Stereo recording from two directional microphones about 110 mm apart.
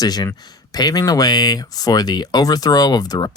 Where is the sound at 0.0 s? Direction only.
35° left (ahead or behind).